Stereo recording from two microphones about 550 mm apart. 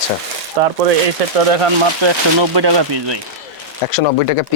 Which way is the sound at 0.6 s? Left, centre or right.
Right.